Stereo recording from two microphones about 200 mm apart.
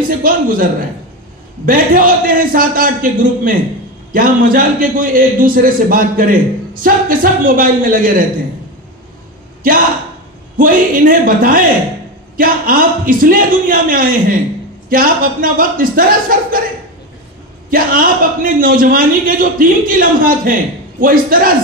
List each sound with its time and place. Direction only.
0.2 s a man's voice: 45° right (ahead or behind)
9.6 s a man's voice: 45° right (ahead or behind)
17.6 s a man's voice: 45° right (ahead or behind)